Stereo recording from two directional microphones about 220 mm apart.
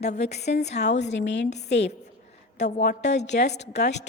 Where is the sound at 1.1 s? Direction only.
55° left (ahead or behind).